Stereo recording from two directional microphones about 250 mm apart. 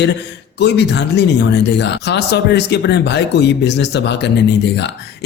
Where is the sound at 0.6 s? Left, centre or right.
Left.